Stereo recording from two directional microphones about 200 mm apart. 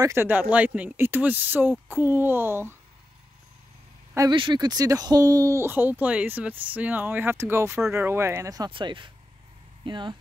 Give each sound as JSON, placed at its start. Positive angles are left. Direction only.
{"t": 0.0, "sound": "speech", "side_deg": -10}
{"t": 4.1, "sound": "speech", "side_deg": -20}